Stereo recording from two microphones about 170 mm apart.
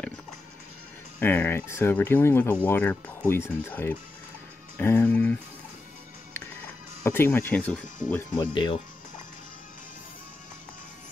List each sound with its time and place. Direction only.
1.2 s speech: 10° left (ahead or behind)
4.7 s music: 10° left (ahead or behind)
7.0 s speech: 15° left (ahead or behind)
8.4 s speech: 25° left (ahead or behind)